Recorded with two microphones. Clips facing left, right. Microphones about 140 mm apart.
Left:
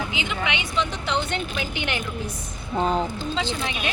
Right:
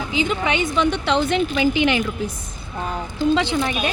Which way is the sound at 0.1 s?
40° right (ahead or behind).